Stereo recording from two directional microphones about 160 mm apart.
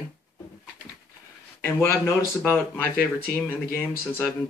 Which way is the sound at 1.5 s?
15° left (ahead or behind).